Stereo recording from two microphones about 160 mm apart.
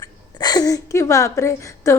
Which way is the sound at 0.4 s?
25° left (ahead or behind).